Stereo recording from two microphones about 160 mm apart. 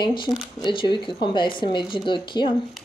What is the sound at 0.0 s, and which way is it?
Speech, 30° left (ahead or behind).